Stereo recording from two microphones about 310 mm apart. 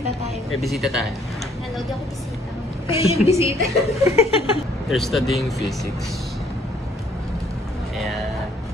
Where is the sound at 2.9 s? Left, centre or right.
Centre.